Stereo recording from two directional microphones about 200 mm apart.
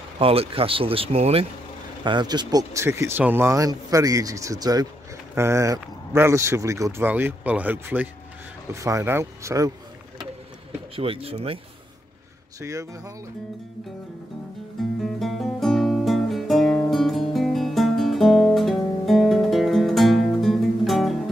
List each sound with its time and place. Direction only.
0.2 s speech: 30° right (ahead or behind)
11.0 s speech: 30° right (ahead or behind)
12.5 s speech: 15° right (ahead or behind)
14.8 s music: centre (ahead or behind)